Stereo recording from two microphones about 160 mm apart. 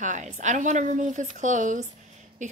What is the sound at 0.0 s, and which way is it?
A woman's voice, 50° right (ahead or behind).